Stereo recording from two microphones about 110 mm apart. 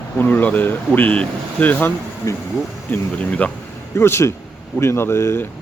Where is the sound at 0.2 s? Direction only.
15° left (ahead or behind).